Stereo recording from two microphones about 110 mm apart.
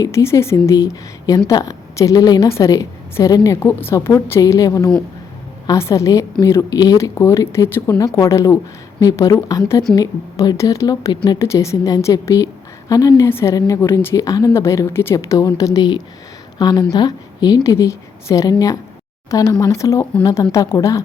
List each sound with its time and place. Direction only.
0.0 s a woman's voice: 25° left (ahead or behind)
3.6 s a woman's voice: 20° left (ahead or behind)